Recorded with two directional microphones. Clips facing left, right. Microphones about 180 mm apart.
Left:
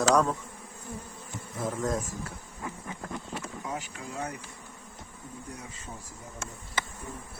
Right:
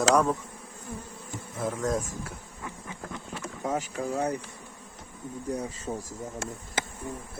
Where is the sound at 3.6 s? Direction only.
45° right (ahead or behind).